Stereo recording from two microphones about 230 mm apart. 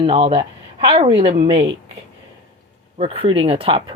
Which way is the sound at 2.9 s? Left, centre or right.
Right.